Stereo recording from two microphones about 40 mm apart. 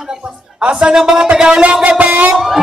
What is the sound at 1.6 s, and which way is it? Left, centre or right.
Speech, right.